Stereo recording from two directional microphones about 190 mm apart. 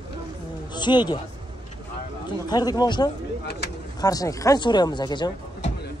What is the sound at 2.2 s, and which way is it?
Speech, 20° left (ahead or behind).